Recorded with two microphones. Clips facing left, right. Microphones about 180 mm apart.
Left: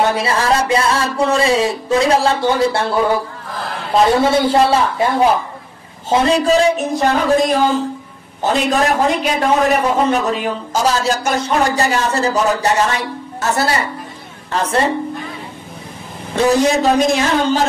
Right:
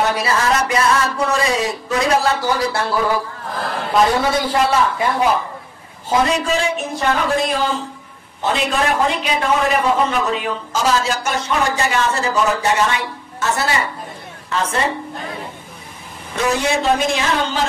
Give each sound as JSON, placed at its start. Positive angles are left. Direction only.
{"t": 0.0, "sound": "music", "side_deg": 25}
{"t": 6.0, "sound": "a man's voice", "side_deg": 30}
{"t": 16.3, "sound": "a man's voice", "side_deg": 35}